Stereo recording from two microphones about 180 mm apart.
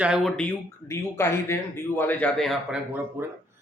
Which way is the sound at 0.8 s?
15° left (ahead or behind).